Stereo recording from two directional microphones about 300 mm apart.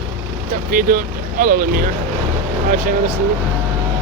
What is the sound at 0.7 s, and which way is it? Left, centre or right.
Speech, right.